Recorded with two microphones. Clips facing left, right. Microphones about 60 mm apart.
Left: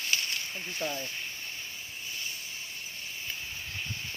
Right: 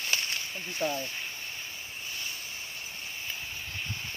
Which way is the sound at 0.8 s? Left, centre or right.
Centre.